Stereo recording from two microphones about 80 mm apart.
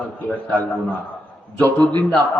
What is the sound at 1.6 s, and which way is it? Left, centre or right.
Speech, left.